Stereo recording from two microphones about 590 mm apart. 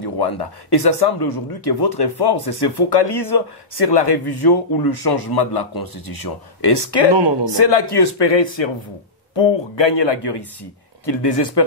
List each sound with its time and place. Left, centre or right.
0.0 s a man's voice: left